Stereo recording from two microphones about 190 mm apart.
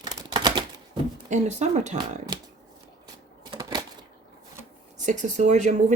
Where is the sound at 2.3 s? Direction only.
25° right (ahead or behind).